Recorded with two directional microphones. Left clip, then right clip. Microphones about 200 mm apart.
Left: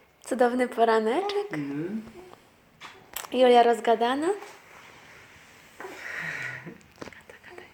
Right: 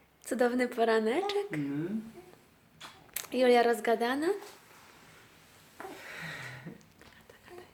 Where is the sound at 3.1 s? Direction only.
5° left (ahead or behind).